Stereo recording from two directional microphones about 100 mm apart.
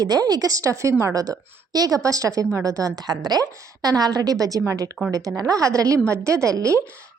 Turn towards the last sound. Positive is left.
turn(degrees=-30)  # may be behind; listen again after turning